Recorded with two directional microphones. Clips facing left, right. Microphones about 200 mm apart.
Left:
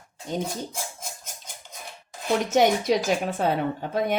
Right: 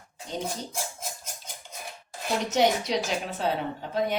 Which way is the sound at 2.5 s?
50° left (ahead or behind).